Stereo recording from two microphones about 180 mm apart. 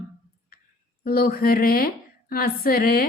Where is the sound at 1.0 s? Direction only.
60° left (ahead or behind).